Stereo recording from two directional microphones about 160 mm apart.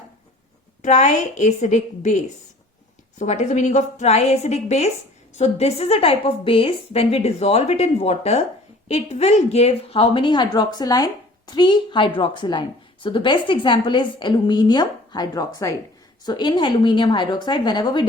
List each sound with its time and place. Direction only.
0.8 s a woman's voice: 50° left (ahead or behind); by 18.0 s 30° left (ahead or behind)